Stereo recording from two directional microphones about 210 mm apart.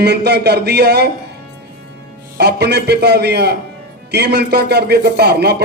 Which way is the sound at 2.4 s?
50° right (ahead or behind).